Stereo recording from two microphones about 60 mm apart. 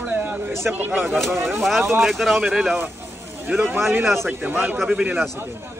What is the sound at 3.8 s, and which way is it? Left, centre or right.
Speech, right.